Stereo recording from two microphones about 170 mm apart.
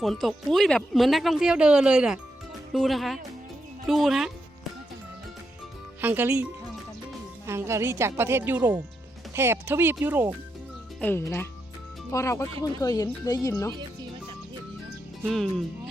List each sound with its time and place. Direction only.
0.0 s speech: centre (ahead or behind)
6.0 s a woman's voice: 10° right (ahead or behind)
11.0 s speech: 15° left (ahead or behind)
15.3 s speech: centre (ahead or behind)